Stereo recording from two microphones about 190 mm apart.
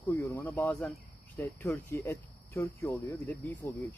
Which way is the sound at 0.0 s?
10° left (ahead or behind).